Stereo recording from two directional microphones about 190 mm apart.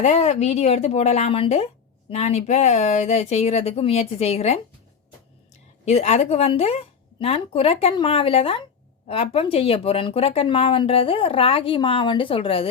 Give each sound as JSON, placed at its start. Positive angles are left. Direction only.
{"t": 0.0, "sound": "a woman's voice", "side_deg": 35}
{"t": 5.8, "sound": "a woman's voice", "side_deg": 35}